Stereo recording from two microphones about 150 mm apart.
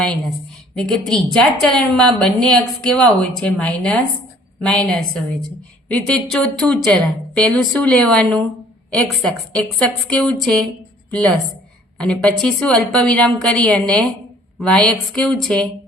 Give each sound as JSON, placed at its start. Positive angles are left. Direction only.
{"t": 0.8, "sound": "a woman's voice", "side_deg": 5}